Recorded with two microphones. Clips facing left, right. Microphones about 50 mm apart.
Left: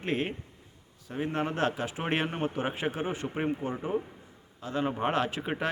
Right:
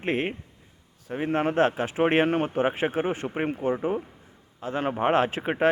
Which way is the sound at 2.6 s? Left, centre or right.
Right.